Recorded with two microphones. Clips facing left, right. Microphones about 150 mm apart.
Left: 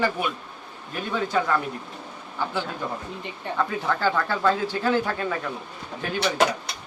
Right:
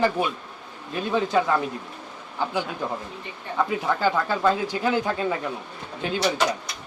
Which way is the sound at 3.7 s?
15° right (ahead or behind).